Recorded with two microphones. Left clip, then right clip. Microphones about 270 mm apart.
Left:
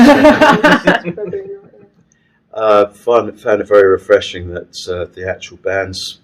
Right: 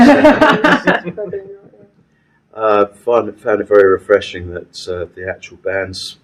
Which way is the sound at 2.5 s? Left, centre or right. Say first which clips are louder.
Left 2 dB; centre.